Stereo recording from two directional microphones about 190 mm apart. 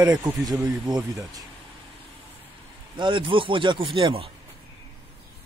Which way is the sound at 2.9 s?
25° right (ahead or behind).